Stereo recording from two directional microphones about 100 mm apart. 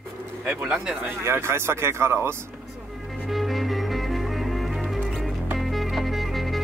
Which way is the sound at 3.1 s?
Centre (ahead or behind).